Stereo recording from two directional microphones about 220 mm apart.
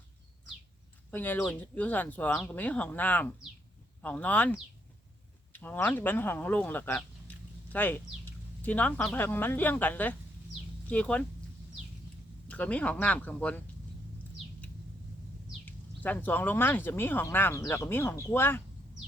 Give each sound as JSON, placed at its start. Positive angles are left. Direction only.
{"t": 1.1, "sound": "speech", "side_deg": 10}
{"t": 5.5, "sound": "speech", "side_deg": 10}
{"t": 12.5, "sound": "speech", "side_deg": 5}
{"t": 15.6, "sound": "speech", "side_deg": 10}